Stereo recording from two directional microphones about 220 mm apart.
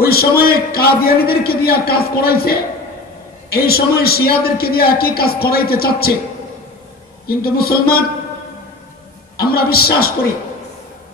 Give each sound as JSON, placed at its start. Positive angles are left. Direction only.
{"t": 0.0, "sound": "a man's voice", "side_deg": 45}
{"t": 7.2, "sound": "a man's voice", "side_deg": 45}
{"t": 9.4, "sound": "a man's voice", "side_deg": 45}